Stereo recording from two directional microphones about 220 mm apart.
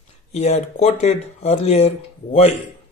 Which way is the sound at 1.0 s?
30° left (ahead or behind).